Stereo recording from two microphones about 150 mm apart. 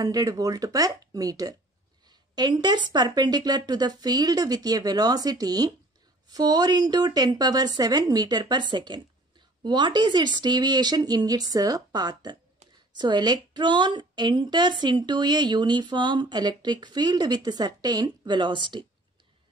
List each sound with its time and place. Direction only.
0.0 s a woman's voice: 25° right (ahead or behind)